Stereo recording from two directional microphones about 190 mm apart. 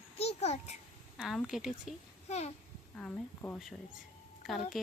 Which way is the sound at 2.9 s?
10° left (ahead or behind).